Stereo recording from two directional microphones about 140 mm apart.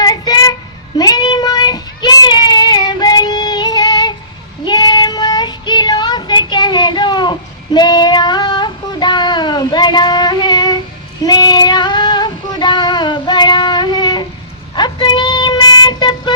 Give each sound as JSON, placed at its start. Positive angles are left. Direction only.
{"t": 0.0, "sound": "child singing", "side_deg": 25}